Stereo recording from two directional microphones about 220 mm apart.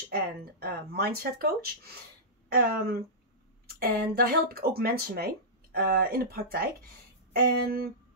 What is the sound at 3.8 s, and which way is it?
Speech, 45° right (ahead or behind).